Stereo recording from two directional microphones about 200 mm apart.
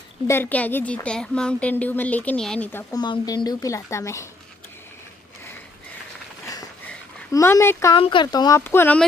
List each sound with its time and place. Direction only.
0.3 s a woman's voice: 10° left (ahead or behind)
6.9 s a sound: 15° left (ahead or behind)
7.9 s a woman's voice: 25° left (ahead or behind); by 9.0 s 10° left (ahead or behind)